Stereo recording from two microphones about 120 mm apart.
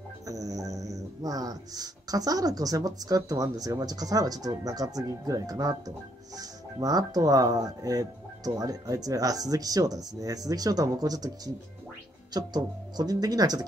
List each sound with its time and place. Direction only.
0.3 s speech: 30° right (ahead or behind)